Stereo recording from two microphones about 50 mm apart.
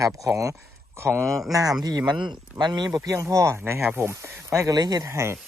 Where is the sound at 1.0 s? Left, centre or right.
Right.